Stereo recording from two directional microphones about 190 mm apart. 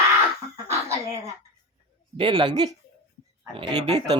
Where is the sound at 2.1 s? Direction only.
25° right (ahead or behind).